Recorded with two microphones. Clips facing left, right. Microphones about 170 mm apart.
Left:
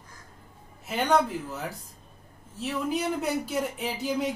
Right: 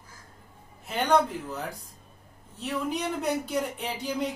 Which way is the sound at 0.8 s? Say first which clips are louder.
Even; 5° left (ahead or behind).